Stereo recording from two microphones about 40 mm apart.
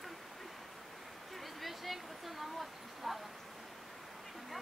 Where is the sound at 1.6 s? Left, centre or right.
Centre.